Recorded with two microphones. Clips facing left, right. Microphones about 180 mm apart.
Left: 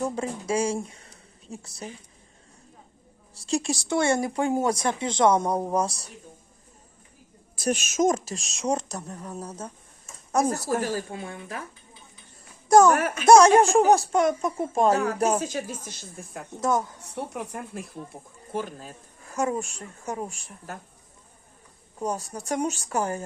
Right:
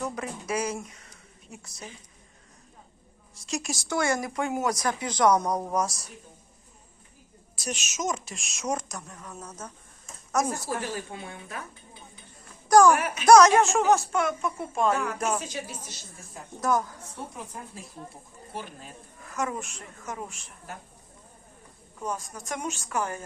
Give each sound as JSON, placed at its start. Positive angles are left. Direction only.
{"t": 0.0, "sound": "speech", "side_deg": 30}
{"t": 3.3, "sound": "speech", "side_deg": 30}
{"t": 7.6, "sound": "speech", "side_deg": 50}
{"t": 8.3, "sound": "a woman's voice", "side_deg": 35}
{"t": 10.5, "sound": "a woman's voice", "side_deg": 40}
{"t": 12.6, "sound": "a sound", "side_deg": 25}
{"t": 12.9, "sound": "speech", "side_deg": 45}
{"t": 13.2, "sound": "a woman's voice", "side_deg": 25}
{"t": 16.6, "sound": "speech", "side_deg": 25}
{"t": 17.2, "sound": "speech", "side_deg": 70}
{"t": 18.1, "sound": "a woman's voice", "side_deg": 45}
{"t": 21.9, "sound": "a woman's voice", "side_deg": 35}